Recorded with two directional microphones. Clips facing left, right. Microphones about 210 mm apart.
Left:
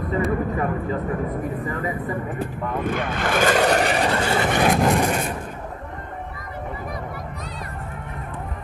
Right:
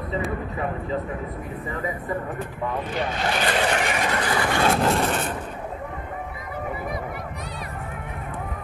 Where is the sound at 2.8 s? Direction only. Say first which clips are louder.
Left 4 dB; 50° left (ahead or behind); by 5.4 s 10° left (ahead or behind).